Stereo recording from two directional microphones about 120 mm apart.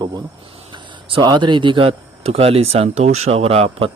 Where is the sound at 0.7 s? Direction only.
45° right (ahead or behind).